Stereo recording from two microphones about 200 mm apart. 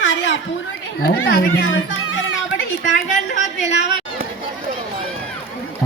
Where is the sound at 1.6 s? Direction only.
85° left.